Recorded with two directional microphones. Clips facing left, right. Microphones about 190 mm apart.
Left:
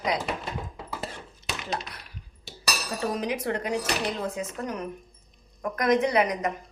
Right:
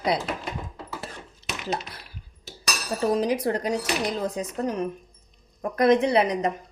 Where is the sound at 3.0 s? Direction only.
35° right (ahead or behind).